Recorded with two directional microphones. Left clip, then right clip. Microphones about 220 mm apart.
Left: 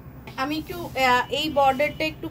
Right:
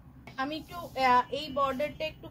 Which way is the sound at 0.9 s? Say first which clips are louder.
Left 4 dB; 20° left (ahead or behind).